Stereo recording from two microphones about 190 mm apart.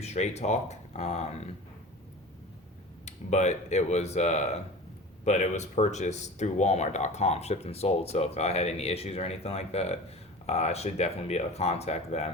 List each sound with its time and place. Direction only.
0.0 s speech: 35° left (ahead or behind)
3.1 s speech: 35° left (ahead or behind)